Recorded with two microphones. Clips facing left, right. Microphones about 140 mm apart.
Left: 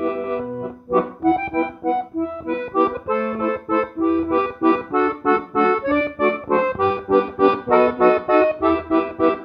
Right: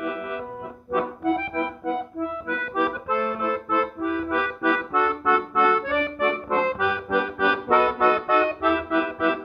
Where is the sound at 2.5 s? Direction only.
30° left (ahead or behind).